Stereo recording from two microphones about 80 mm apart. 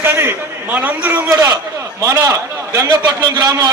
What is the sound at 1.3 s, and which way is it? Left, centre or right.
A man's voice, right.